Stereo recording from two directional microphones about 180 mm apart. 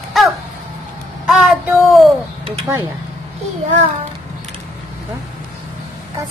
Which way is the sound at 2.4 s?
30° right (ahead or behind).